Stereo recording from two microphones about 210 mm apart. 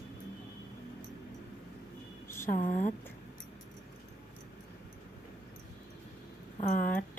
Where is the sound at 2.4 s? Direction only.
40° left (ahead or behind).